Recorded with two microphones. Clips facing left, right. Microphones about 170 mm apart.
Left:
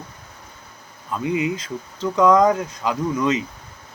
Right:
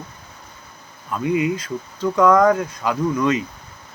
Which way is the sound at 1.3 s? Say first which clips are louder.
Right 3 dB; 20° left (ahead or behind).